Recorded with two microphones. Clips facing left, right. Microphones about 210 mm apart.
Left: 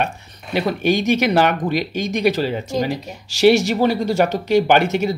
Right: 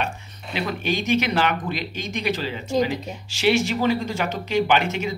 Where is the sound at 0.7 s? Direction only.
40° left (ahead or behind).